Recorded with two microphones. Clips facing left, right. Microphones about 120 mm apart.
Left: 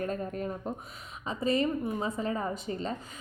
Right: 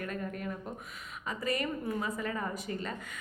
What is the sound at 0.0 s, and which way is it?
A woman's voice, 30° left (ahead or behind).